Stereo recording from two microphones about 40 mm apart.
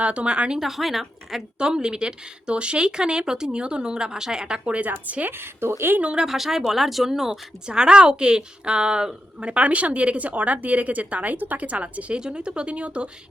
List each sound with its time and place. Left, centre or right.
0.0 s speech: right
0.6 s a woman's voice: centre
1.5 s speech: right
4.6 s a woman's voice: right
5.3 s a woman's voice: right
6.2 s speech: centre
7.7 s a woman's voice: right
12.1 s speech: right